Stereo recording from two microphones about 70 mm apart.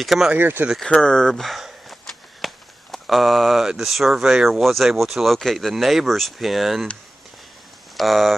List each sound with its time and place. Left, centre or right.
0.0 s speech: centre
0.4 s speech: right
0.7 s speech: centre
8.0 s speech: centre